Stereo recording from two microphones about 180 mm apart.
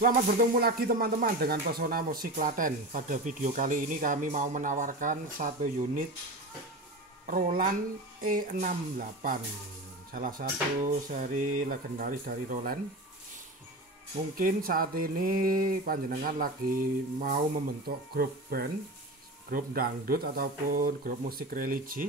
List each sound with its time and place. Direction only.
0.0 s speech: 55° right (ahead or behind)
7.2 s speech: 50° right (ahead or behind)
14.3 s speech: 55° right (ahead or behind)